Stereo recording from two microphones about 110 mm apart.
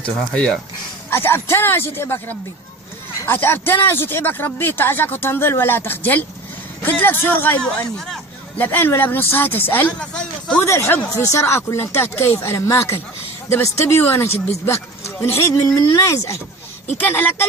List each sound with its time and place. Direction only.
0.0 s speech: 10° left (ahead or behind)
1.1 s speech: 20° left (ahead or behind)
7.9 s a man's voice: 5° left (ahead or behind)
8.5 s speech: 15° left (ahead or behind)
10.0 s speech: 10° left (ahead or behind)
10.6 s speech: 25° left (ahead or behind)